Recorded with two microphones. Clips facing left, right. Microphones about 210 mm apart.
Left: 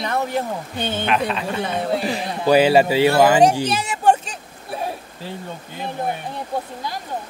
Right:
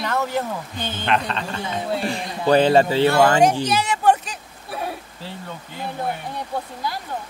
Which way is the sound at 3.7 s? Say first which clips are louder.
Even; 30° left (ahead or behind).